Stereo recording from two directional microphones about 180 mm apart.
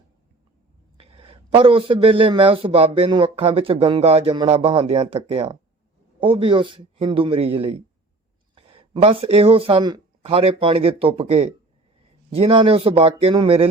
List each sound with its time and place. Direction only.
0.9 s speech: 30° right (ahead or behind)